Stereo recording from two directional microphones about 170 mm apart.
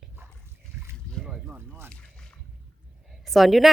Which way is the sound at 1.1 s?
5° right (ahead or behind).